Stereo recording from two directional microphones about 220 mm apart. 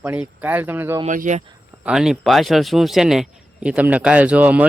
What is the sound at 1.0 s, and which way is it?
Speech, 35° right (ahead or behind).